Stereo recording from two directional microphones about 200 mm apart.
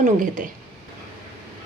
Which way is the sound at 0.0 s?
40° right (ahead or behind).